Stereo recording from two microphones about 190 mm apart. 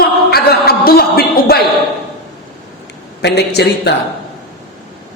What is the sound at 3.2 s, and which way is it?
Speech, 65° left (ahead or behind).